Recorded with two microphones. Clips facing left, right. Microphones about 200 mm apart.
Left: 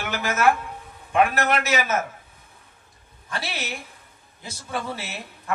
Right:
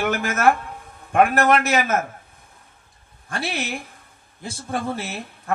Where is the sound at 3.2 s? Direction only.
50° right (ahead or behind).